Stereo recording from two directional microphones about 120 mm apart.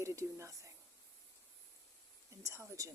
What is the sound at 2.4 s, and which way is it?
Speech, 25° right (ahead or behind).